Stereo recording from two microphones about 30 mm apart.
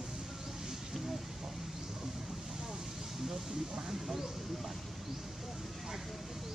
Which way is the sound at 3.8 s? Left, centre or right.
Centre.